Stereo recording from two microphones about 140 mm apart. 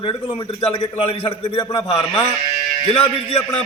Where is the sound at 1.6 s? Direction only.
30° left (ahead or behind).